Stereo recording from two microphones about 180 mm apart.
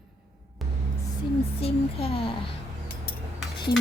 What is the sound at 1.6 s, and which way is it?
Speech, 30° left (ahead or behind).